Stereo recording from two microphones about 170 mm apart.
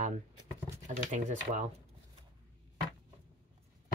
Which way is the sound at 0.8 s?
45° right (ahead or behind).